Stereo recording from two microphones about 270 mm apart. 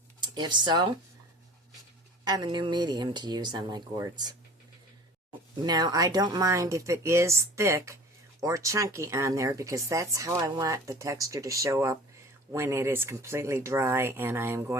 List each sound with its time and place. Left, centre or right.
0.2 s speech: centre
2.2 s speech: centre
5.6 s speech: centre